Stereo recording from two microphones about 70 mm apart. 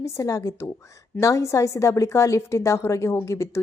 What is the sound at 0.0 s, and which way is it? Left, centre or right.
A woman's voice, left.